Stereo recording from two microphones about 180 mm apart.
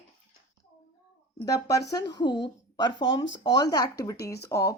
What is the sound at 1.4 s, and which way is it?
Speech, 20° left (ahead or behind).